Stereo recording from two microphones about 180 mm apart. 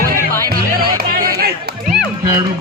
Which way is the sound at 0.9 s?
60° right (ahead or behind).